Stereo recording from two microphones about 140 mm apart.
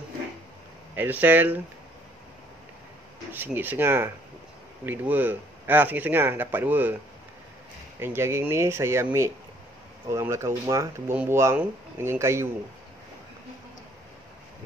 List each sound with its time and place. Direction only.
0.9 s speech: 10° right (ahead or behind)
3.3 s speech: 15° right (ahead or behind)
8.0 s speech: 15° right (ahead or behind)
10.0 s speech: 20° right (ahead or behind)